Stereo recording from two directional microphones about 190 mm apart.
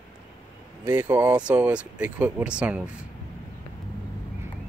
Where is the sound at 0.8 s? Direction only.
10° right (ahead or behind).